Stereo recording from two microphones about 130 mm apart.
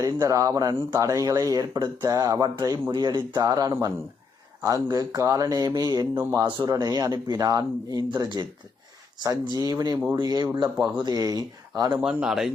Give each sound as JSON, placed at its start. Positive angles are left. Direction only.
{"t": 0.0, "sound": "speech", "side_deg": -25}
{"t": 6.1, "sound": "speech", "side_deg": -20}
{"t": 6.6, "sound": "speech", "side_deg": -30}
{"t": 11.9, "sound": "speech", "side_deg": -5}